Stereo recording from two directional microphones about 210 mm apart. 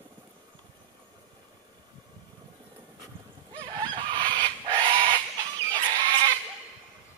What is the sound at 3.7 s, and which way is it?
Fowl, 20° right (ahead or behind).